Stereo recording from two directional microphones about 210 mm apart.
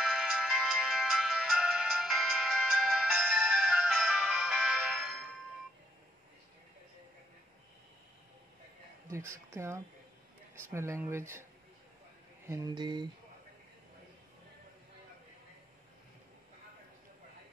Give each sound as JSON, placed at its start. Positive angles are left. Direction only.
{"t": 0.0, "sound": "music", "side_deg": 0}
{"t": 9.1, "sound": "speech", "side_deg": -15}
{"t": 12.4, "sound": "speech", "side_deg": -15}